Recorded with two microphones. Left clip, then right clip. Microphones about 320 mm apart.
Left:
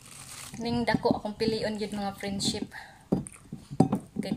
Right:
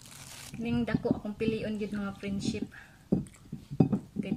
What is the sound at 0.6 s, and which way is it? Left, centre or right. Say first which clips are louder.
A woman's voice: left 5 dB; left.